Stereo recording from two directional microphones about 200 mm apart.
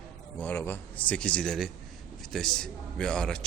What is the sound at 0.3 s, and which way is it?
A man's voice, 10° left (ahead or behind).